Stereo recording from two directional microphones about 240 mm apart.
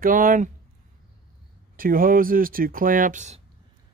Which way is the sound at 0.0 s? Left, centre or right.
Right.